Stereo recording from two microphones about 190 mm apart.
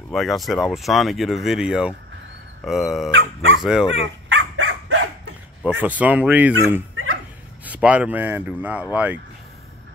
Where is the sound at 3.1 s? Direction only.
90° right.